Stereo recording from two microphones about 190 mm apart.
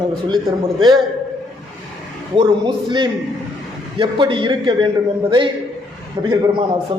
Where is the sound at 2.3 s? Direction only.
25° right (ahead or behind).